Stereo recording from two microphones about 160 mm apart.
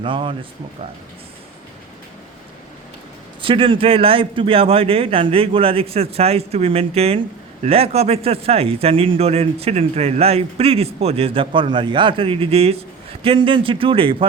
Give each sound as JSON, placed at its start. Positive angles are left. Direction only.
{"t": 0.0, "sound": "speech", "side_deg": -35}
{"t": 3.4, "sound": "speech", "side_deg": -35}